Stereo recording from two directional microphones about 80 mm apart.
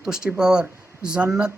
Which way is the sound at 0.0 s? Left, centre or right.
Centre.